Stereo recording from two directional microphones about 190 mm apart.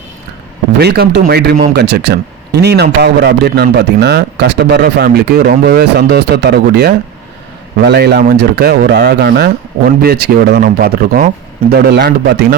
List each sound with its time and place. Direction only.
0.8 s speech: 60° right (ahead or behind)